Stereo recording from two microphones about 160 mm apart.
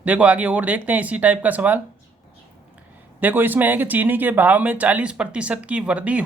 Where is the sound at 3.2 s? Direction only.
10° right (ahead or behind).